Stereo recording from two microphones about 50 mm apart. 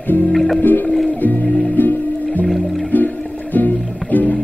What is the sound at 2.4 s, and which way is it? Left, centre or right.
Music, centre.